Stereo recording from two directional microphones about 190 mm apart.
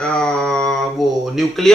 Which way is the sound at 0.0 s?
5° left (ahead or behind).